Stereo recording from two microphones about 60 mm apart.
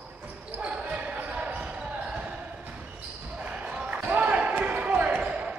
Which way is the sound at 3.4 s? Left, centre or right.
Right.